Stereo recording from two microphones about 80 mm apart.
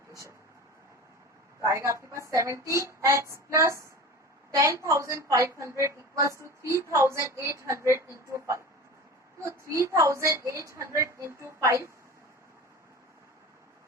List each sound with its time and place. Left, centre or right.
0.1 s speech: right
1.6 s a woman's voice: right